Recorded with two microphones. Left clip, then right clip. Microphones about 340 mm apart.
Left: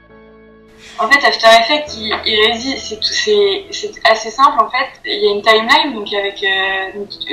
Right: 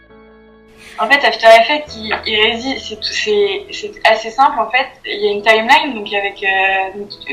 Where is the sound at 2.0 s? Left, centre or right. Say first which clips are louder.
Left 1 dB; right.